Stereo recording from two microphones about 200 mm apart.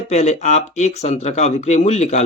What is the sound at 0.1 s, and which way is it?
Speech, 35° left (ahead or behind).